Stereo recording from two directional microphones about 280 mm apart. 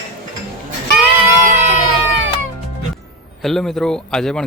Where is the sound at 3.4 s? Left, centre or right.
Centre.